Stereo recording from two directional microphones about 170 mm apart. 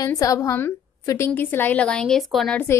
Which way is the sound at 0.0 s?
20° left (ahead or behind).